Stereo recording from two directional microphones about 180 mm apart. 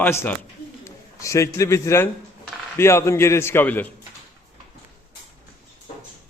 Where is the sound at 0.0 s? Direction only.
10° left (ahead or behind).